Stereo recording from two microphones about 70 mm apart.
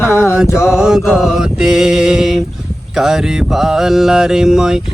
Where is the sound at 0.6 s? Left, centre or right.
Centre.